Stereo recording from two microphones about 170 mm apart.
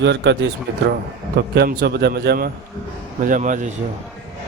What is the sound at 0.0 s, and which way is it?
Speech, 90° right.